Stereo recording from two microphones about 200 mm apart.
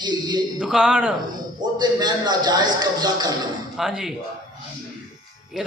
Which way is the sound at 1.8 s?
20° right (ahead or behind).